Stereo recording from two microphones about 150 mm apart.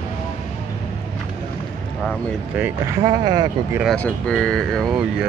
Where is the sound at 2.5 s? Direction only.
15° right (ahead or behind).